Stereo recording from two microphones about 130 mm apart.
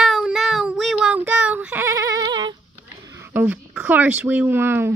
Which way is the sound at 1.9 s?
25° right (ahead or behind).